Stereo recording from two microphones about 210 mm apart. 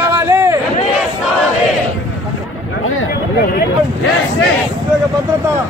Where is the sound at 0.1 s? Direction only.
15° right (ahead or behind).